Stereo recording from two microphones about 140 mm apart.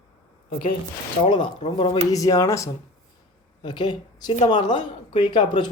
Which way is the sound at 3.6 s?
35° left (ahead or behind).